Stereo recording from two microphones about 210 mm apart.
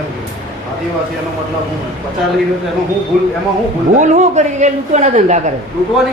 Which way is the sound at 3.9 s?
35° right (ahead or behind).